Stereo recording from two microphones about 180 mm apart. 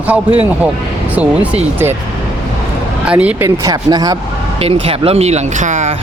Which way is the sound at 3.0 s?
5° right (ahead or behind).